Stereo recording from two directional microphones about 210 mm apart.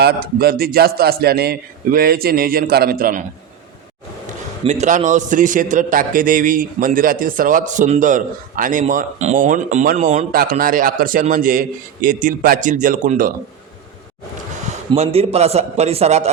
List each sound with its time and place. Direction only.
0.0 s a man's voice: 45° right (ahead or behind)
4.6 s a man's voice: 35° right (ahead or behind)
14.9 s a man's voice: 30° right (ahead or behind)